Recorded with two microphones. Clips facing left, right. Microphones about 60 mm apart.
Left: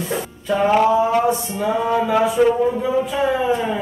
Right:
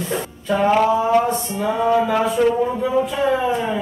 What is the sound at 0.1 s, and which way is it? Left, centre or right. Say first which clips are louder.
A man's voice: even; centre.